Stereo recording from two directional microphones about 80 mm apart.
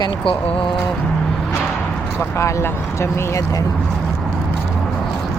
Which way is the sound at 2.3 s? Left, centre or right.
Left.